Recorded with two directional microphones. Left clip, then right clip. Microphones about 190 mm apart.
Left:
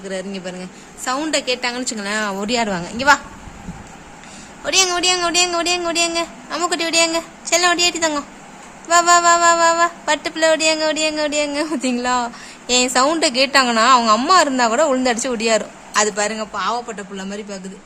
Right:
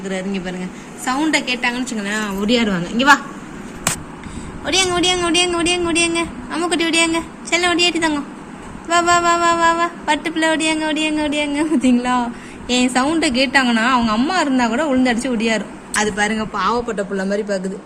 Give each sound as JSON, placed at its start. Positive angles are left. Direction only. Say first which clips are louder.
{"t": 0.1, "sound": "music", "louder": "right 2 dB", "side_deg": 15}
{"t": 1.0, "sound": "a woman's voice", "louder": "right 2 dB", "side_deg": 20}
{"t": 4.6, "sound": "music", "louder": "even", "side_deg": 10}
{"t": 16.5, "sound": "a man's voice", "louder": "right 3 dB", "side_deg": 0}